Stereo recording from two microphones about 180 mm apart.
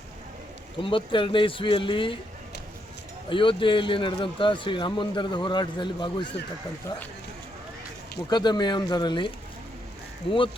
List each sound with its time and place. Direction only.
0.8 s a man's voice: 30° left (ahead or behind)
3.2 s a man's voice: 30° left (ahead or behind)
8.3 s a man's voice: 25° left (ahead or behind)